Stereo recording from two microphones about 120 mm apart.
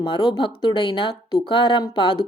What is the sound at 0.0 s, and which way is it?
A woman's voice, 40° left (ahead or behind).